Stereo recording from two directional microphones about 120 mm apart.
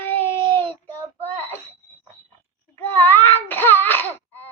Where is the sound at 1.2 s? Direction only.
15° left (ahead or behind).